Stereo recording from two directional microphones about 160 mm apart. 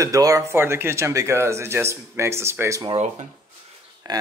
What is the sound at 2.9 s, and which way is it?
Speech, 45° right (ahead or behind).